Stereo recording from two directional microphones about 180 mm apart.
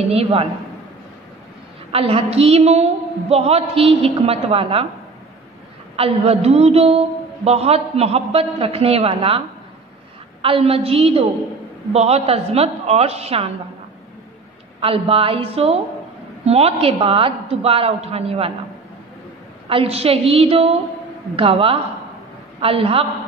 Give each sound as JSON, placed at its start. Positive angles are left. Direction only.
{"t": 0.1, "sound": "a woman's voice", "side_deg": -30}
{"t": 1.9, "sound": "a woman's voice", "side_deg": -30}
{"t": 5.9, "sound": "a woman's voice", "side_deg": -35}
{"t": 10.4, "sound": "a woman's voice", "side_deg": -30}
{"t": 14.8, "sound": "a woman's voice", "side_deg": -30}
{"t": 19.7, "sound": "a woman's voice", "side_deg": -35}